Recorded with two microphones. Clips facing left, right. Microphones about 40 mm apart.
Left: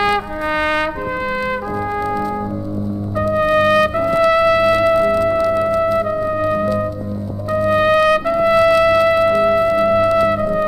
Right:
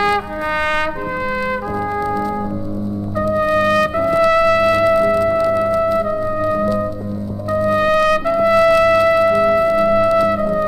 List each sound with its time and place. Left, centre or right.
0.0 s trumpet: centre
3.2 s trumpet: centre
5.5 s music: centre
7.5 s trumpet: centre